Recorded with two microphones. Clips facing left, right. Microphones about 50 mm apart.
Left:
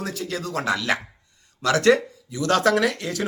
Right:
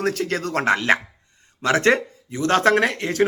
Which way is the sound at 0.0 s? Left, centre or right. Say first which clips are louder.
Right 6 dB; right.